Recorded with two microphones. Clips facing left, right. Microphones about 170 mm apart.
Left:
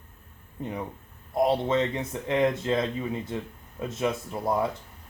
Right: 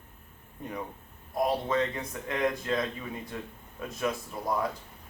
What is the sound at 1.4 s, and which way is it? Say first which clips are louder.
Speech: left 4 dB; 25° left (ahead or behind).